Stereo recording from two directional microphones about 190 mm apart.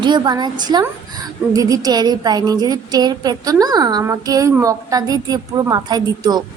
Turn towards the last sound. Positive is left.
turn(degrees=-20)  # may be behind; listen again after turning